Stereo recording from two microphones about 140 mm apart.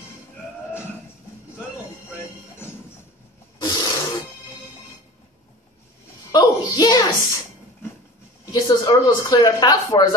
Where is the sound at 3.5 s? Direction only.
30° left (ahead or behind).